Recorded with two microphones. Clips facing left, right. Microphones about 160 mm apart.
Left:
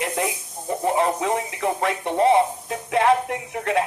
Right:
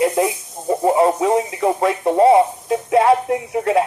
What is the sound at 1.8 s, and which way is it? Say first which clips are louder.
Radio: right 6 dB; 30° right (ahead or behind).